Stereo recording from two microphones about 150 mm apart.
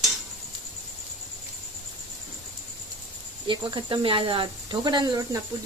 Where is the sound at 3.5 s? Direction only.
35° right (ahead or behind).